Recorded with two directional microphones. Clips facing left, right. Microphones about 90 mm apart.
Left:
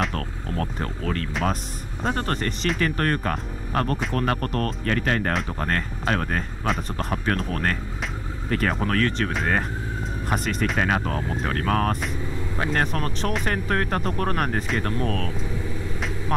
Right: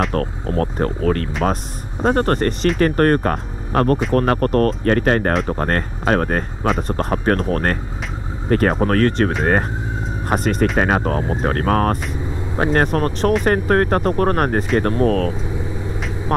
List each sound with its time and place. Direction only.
0.1 s speech: 40° right (ahead or behind)